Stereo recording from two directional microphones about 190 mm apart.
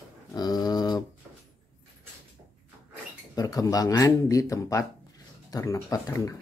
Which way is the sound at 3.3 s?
20° left (ahead or behind).